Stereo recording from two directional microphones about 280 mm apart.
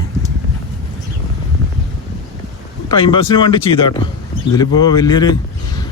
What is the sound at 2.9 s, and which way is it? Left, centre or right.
A man's voice, centre.